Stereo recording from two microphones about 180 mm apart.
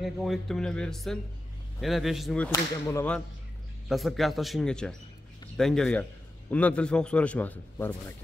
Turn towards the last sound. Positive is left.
turn(degrees=10)  # may be behind; listen again after turning